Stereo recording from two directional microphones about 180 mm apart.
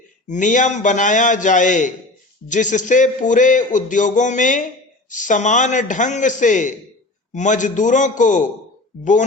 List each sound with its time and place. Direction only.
0.3 s speech: 45° left (ahead or behind)